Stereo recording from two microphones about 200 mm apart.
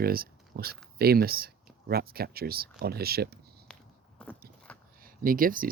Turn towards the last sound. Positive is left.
turn(degrees=-45)  # may be behind; listen again after turning